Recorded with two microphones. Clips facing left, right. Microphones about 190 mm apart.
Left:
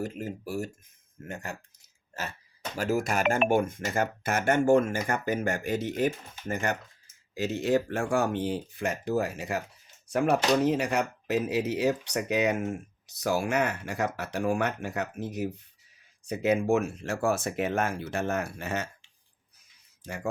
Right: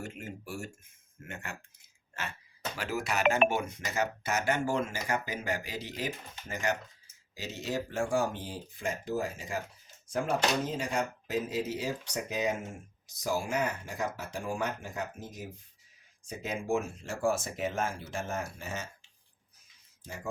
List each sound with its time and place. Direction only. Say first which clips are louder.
0.0 s speech: left 7 dB; 40° left (ahead or behind)
1.2 s a sound: left 5 dB; 40° left (ahead or behind)
2.7 s speech: left 6 dB; 45° left (ahead or behind); by 18.9 s 65° left (ahead or behind)